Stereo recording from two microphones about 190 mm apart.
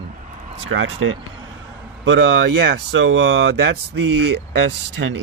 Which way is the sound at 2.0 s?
70° right (ahead or behind).